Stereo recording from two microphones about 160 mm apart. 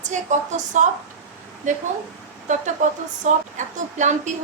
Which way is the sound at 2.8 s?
50° right (ahead or behind).